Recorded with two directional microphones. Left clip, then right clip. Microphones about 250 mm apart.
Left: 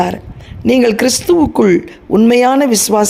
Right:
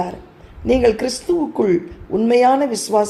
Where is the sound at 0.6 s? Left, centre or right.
Left.